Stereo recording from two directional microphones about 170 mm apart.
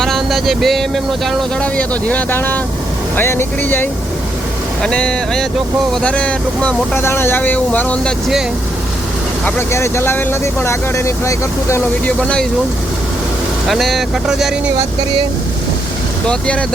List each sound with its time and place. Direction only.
0.0 s speech: centre (ahead or behind)
9.4 s speech: 15° left (ahead or behind)
12.2 s speech: 5° left (ahead or behind)
13.7 s speech: centre (ahead or behind)
16.2 s speech: 5° left (ahead or behind)